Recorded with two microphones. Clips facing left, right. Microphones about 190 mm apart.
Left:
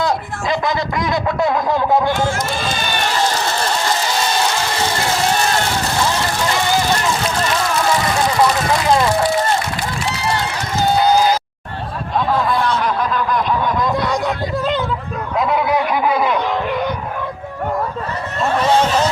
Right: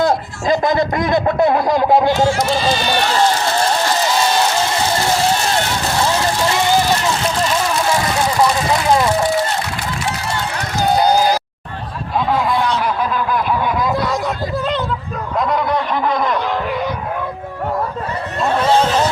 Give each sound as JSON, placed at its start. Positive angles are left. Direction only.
{"t": 0.0, "sound": "speech", "side_deg": -50}
{"t": 1.5, "sound": "a sound", "side_deg": -35}
{"t": 1.7, "sound": "speech", "side_deg": -15}
{"t": 2.3, "sound": "speech", "side_deg": 50}
{"t": 12.6, "sound": "snicker", "side_deg": -5}
{"t": 13.8, "sound": "a sound", "side_deg": 0}
{"t": 15.4, "sound": "speech", "side_deg": 5}